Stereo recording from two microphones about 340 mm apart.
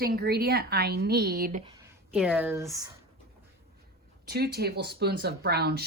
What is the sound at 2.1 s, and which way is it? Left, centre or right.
Speech, centre.